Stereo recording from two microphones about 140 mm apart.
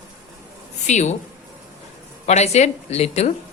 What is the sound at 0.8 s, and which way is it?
Speech, 55° left (ahead or behind).